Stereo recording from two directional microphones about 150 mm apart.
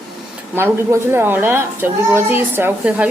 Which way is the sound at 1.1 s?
15° right (ahead or behind).